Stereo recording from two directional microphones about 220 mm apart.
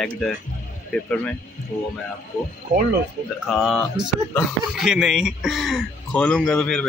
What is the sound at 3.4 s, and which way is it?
Speech, centre (ahead or behind).